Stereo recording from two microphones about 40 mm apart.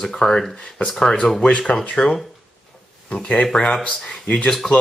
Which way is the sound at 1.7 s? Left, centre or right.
Left.